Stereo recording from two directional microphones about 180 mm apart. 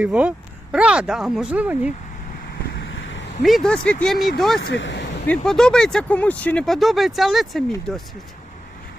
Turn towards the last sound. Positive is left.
turn(degrees=0)  # may be behind; listen again after turning